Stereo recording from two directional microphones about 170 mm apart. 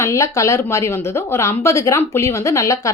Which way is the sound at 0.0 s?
15° left (ahead or behind).